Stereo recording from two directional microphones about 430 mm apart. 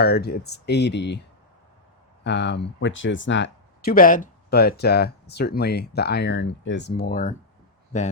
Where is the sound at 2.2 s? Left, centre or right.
Left.